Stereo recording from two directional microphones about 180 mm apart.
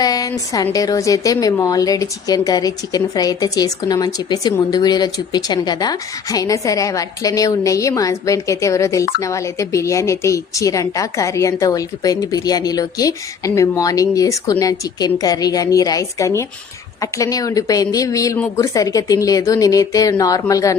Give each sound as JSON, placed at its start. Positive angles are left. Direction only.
{"t": 0.0, "sound": "a woman's voice", "side_deg": 20}